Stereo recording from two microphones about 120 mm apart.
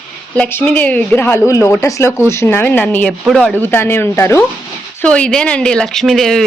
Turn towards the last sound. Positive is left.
turn(degrees=0)  # may be behind; listen again after turning